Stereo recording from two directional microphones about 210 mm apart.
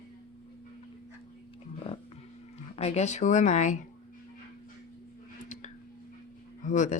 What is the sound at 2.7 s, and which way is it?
Speech, 30° left (ahead or behind).